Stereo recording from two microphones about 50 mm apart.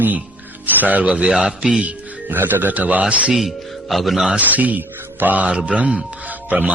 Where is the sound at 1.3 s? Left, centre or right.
Centre.